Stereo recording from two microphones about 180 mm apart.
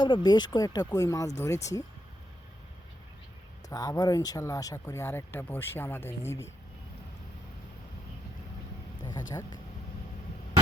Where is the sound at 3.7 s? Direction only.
20° left (ahead or behind).